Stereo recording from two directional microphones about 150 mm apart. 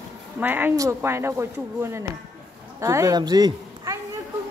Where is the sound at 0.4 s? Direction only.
10° right (ahead or behind).